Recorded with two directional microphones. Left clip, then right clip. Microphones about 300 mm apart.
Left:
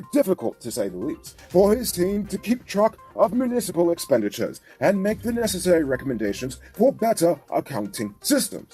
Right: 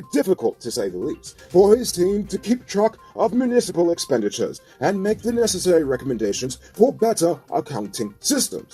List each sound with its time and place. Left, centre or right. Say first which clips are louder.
0.2 s speech: right 2 dB; left